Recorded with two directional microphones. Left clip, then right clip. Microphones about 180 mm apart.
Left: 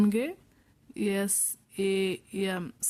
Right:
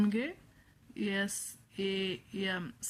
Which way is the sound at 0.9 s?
45° left (ahead or behind).